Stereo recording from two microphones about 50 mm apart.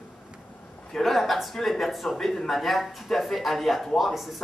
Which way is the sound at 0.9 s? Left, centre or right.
Centre.